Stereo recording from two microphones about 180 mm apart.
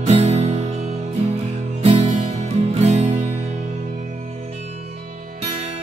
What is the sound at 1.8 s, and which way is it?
Music, 35° right (ahead or behind).